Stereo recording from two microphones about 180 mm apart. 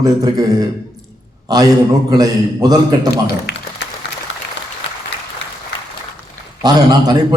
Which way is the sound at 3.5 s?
65° left (ahead or behind).